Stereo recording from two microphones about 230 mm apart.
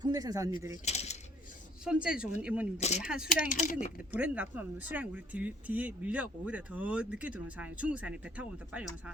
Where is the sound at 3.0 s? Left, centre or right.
Centre.